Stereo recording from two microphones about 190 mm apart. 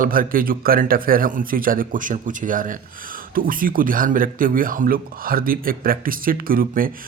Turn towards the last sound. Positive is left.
turn(degrees=-50)  # may be behind; listen again after turning